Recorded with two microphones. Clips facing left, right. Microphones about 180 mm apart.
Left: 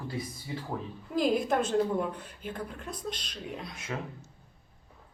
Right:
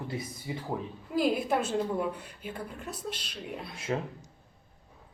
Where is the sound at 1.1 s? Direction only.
5° right (ahead or behind).